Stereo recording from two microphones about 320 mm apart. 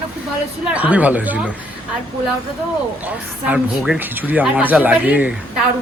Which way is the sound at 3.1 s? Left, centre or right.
Centre.